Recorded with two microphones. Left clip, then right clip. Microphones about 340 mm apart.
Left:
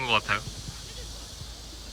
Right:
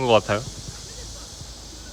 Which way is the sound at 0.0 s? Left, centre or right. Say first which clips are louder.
Right 7 dB; centre.